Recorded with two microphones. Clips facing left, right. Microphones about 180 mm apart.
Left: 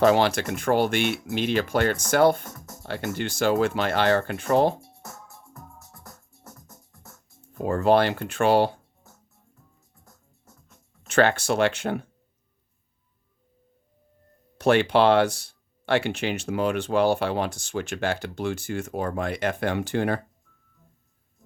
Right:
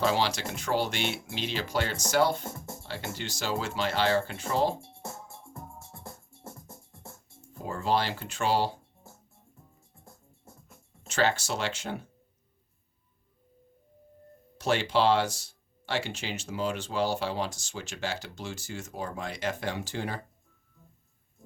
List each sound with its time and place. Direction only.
0.0 s speech: 50° left (ahead or behind)
2.4 s speech: 25° right (ahead or behind)
2.8 s speech: 55° left (ahead or behind)
4.8 s music: 25° right (ahead or behind)
7.6 s speech: 60° left (ahead or behind)
9.9 s music: 25° right (ahead or behind)
11.1 s speech: 60° left (ahead or behind)
14.6 s speech: 60° left (ahead or behind)